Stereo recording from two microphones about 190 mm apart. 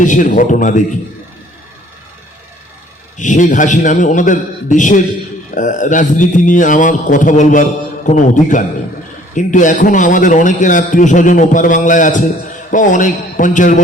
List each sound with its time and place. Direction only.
0.0 s a man's voice: 40° left (ahead or behind)
3.2 s a man's voice: 40° left (ahead or behind)